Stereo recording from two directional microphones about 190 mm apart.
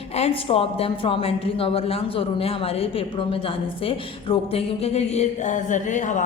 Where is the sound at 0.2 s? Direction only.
30° left (ahead or behind).